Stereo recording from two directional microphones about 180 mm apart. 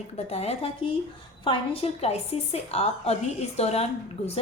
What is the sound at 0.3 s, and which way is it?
A woman's voice, 35° left (ahead or behind).